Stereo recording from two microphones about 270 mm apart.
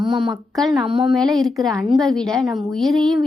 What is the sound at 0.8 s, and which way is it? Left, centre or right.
Speech, centre.